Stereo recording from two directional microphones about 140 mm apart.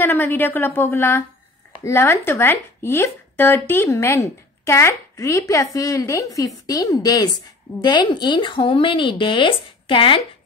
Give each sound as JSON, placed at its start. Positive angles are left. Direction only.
{"t": 0.0, "sound": "a woman's voice", "side_deg": 15}